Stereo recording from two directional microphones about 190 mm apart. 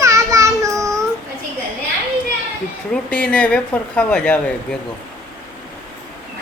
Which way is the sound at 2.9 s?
5° left (ahead or behind).